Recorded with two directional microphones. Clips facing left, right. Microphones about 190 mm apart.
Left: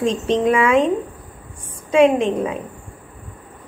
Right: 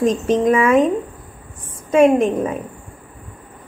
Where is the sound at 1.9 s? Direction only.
5° right (ahead or behind).